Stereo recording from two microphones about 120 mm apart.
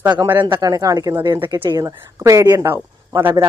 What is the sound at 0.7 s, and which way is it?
A man's voice, 30° right (ahead or behind).